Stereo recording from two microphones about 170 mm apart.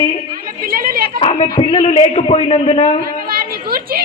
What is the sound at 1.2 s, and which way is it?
A man's voice, 35° left (ahead or behind).